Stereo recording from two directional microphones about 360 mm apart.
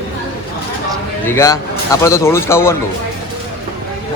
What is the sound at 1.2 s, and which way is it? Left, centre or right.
Speech, centre.